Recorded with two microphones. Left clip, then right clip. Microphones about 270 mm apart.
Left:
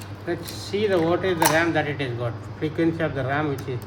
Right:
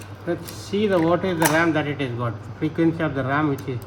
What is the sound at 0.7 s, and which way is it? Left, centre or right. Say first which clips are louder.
Speech: right 2 dB; right.